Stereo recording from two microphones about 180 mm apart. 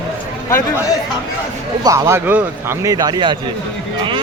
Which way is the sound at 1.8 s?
15° right (ahead or behind).